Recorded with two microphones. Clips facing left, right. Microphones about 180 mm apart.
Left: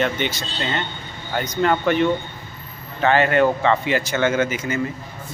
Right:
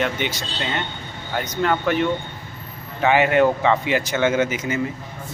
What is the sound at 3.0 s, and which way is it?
Speech, 15° right (ahead or behind).